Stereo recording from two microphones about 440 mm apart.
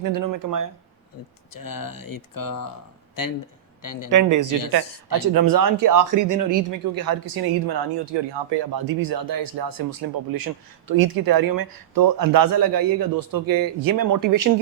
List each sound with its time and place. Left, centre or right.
0.0 s speech: right
1.5 s speech: left
4.1 s speech: right
7.7 s speech: right